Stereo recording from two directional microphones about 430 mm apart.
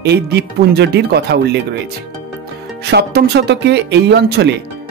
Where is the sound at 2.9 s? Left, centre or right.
Right.